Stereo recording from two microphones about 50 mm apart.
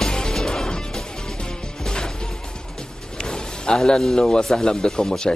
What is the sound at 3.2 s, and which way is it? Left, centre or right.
A man's voice, centre.